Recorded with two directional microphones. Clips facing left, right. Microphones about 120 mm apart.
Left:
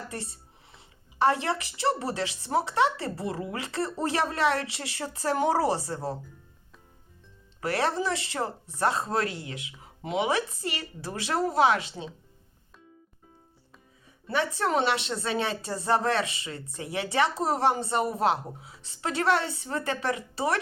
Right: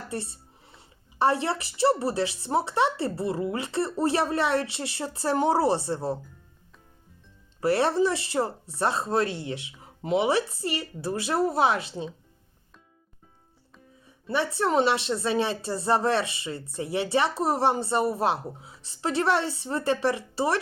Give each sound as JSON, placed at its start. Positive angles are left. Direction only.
{"t": 0.1, "sound": "a woman's voice", "side_deg": -30}
{"t": 7.6, "sound": "speech", "side_deg": -30}
{"t": 14.3, "sound": "speech", "side_deg": -30}